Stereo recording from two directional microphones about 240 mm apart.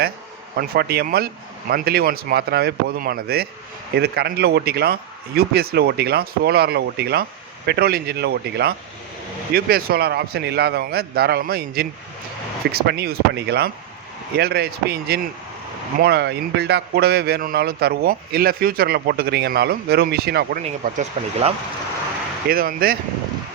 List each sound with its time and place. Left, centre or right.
0.5 s a man's voice: right
20.6 s a man's voice: right